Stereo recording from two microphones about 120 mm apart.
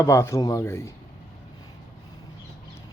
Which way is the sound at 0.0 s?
25° left (ahead or behind).